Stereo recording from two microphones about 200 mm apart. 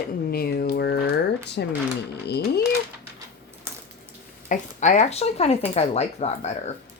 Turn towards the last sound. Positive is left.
turn(degrees=35)  # may be behind; listen again after turning